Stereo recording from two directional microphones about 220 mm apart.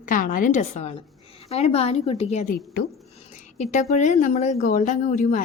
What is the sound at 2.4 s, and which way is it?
Speech, 45° left (ahead or behind).